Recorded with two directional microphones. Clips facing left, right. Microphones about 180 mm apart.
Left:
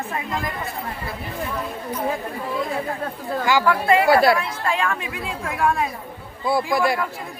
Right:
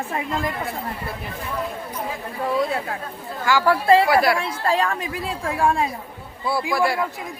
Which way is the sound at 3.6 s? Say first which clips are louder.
Right 3 dB; 30° right (ahead or behind).